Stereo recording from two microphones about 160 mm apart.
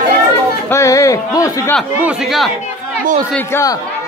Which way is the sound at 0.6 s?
20° left (ahead or behind).